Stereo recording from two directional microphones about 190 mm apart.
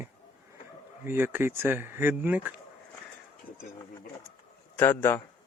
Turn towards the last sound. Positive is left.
turn(degrees=10)  # may be behind; listen again after turning